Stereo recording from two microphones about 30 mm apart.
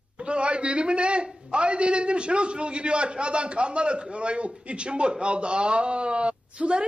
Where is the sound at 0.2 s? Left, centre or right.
Right.